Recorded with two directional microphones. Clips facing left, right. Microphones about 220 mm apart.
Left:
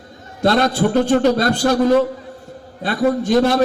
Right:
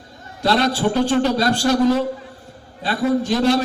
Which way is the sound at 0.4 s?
50° left (ahead or behind).